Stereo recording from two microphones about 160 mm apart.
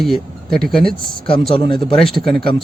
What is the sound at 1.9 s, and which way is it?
Speech, centre (ahead or behind).